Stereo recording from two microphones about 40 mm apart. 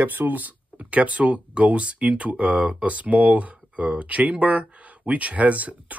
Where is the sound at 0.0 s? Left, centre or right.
Right.